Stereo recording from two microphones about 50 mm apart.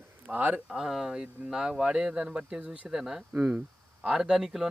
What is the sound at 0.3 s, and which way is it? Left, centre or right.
Speech, right.